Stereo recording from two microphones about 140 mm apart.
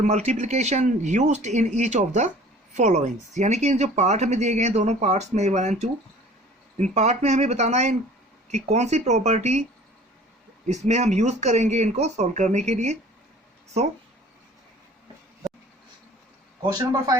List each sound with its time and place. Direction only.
0.0 s speech: 55° right (ahead or behind)
10.7 s speech: 55° right (ahead or behind)